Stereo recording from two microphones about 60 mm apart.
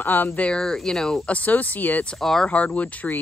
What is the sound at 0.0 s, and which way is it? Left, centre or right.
Speech, left.